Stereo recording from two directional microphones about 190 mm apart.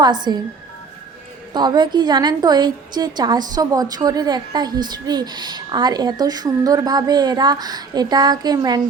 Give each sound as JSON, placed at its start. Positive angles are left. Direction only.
{"t": 0.0, "sound": "a woman's voice", "side_deg": -20}
{"t": 1.5, "sound": "a woman's voice", "side_deg": -25}